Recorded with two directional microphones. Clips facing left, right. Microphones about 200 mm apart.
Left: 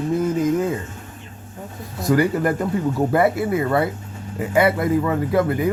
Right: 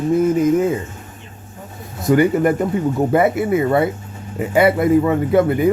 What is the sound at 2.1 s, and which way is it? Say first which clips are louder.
Speech: right 4 dB; 20° right (ahead or behind).